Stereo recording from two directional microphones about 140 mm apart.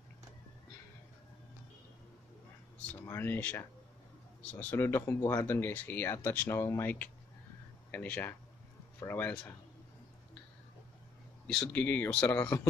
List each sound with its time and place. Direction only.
3.1 s speech: 15° left (ahead or behind)
11.4 s speech: 5° left (ahead or behind)